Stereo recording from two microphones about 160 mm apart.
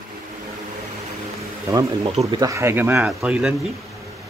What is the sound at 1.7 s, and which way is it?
Speech, 25° right (ahead or behind).